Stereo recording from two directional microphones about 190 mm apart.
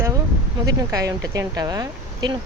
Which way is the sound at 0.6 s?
20° right (ahead or behind).